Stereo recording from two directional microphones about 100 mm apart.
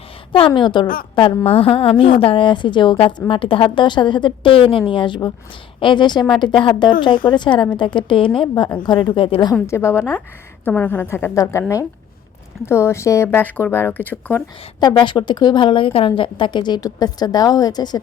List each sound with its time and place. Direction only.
0.3 s a woman's voice: 55° left (ahead or behind)
1.5 s a woman's voice: 70° left (ahead or behind)
9.6 s speech: 25° left (ahead or behind)
12.6 s speech: 25° left (ahead or behind)
14.8 s a woman's voice: 50° left (ahead or behind)